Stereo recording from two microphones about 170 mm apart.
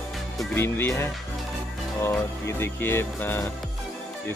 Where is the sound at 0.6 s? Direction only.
15° left (ahead or behind).